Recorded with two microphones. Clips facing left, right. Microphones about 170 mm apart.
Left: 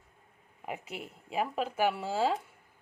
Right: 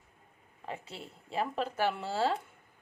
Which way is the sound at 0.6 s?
10° left (ahead or behind).